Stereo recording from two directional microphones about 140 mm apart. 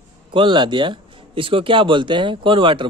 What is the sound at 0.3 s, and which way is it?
Speech, 35° right (ahead or behind).